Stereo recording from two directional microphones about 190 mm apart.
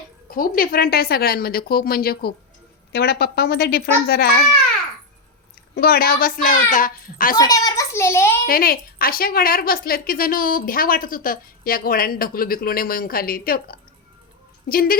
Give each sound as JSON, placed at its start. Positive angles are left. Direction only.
{"t": 0.3, "sound": "a woman's voice", "side_deg": 50}
{"t": 5.7, "sound": "a woman's voice", "side_deg": 55}
{"t": 7.3, "sound": "a child's voice", "side_deg": 20}
{"t": 8.4, "sound": "a woman's voice", "side_deg": 50}